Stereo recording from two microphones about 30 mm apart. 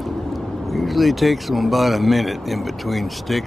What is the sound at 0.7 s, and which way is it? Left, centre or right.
Speech, centre.